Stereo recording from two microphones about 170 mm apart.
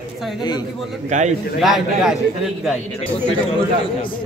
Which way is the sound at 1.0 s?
45° right (ahead or behind).